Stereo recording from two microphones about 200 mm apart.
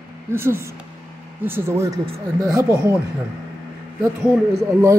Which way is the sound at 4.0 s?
15° right (ahead or behind).